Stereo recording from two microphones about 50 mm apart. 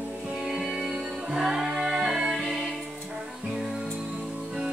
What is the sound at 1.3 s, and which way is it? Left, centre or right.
Music, centre.